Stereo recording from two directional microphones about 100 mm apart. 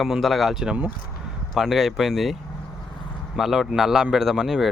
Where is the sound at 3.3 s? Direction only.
5° right (ahead or behind).